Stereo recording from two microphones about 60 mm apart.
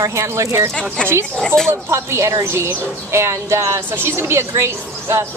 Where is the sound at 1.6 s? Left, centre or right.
Right.